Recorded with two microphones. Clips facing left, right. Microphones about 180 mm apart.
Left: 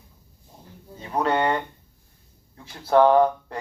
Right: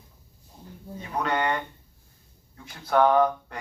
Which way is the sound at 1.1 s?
30° left (ahead or behind).